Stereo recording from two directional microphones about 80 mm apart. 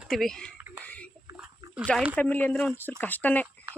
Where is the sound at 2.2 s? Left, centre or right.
Centre.